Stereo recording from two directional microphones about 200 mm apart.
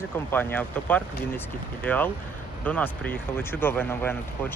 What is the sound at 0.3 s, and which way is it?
Speech, 10° left (ahead or behind).